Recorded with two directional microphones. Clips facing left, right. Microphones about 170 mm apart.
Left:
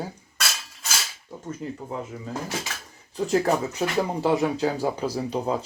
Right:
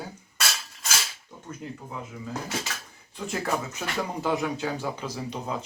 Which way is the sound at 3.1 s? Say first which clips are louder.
Left 7 dB; 35° left (ahead or behind).